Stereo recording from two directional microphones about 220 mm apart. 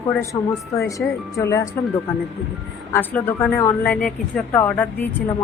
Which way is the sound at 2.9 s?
10° left (ahead or behind).